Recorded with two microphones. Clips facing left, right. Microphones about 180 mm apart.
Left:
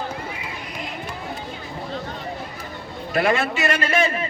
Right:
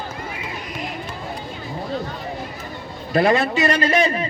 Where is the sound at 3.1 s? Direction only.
25° right (ahead or behind).